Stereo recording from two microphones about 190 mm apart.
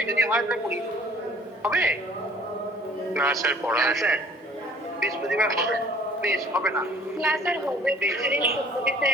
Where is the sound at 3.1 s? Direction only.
10° right (ahead or behind).